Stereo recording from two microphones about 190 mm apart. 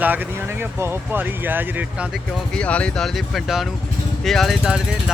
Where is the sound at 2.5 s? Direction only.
5° left (ahead or behind).